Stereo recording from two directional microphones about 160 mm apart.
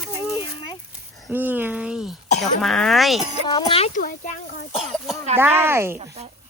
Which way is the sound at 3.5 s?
30° left (ahead or behind).